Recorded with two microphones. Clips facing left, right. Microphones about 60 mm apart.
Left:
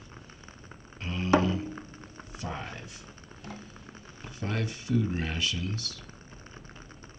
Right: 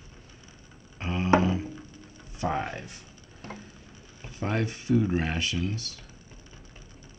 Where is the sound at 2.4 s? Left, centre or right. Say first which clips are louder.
Right 9 dB; right.